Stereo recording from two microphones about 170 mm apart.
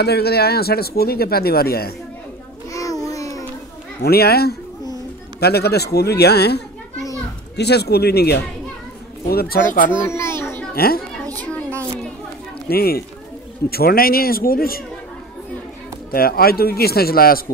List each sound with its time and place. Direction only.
0.0 s speech: 70° left (ahead or behind)
2.7 s a sound: 20° left (ahead or behind)
4.0 s a man's voice: 70° left (ahead or behind)
9.8 s a child's voice: 15° left (ahead or behind)
10.7 s speech: 60° left (ahead or behind)
11.3 s a sound: 10° left (ahead or behind)
12.6 s speech: 65° left (ahead or behind)
16.1 s speech: 60° left (ahead or behind)